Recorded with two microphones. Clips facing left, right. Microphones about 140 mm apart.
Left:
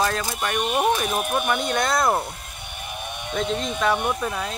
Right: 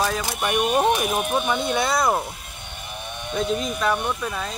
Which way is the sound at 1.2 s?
5° left (ahead or behind).